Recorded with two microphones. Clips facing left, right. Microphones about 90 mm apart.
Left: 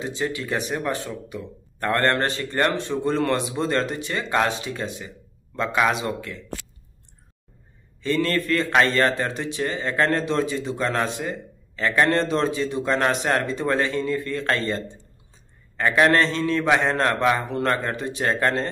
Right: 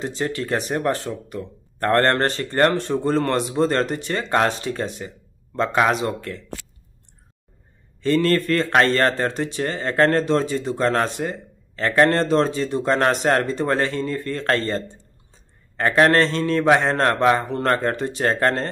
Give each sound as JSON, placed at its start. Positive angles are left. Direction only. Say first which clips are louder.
{"t": 0.0, "sound": "speech", "louder": "right 2 dB", "side_deg": -45}
{"t": 8.0, "sound": "speech", "louder": "right 4 dB", "side_deg": -45}